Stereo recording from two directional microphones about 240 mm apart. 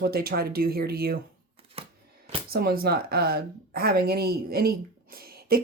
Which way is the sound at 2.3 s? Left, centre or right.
Right.